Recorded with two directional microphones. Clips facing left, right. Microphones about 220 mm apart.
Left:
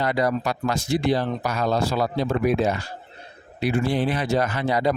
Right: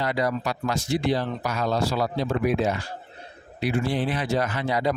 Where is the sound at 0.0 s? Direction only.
50° left (ahead or behind).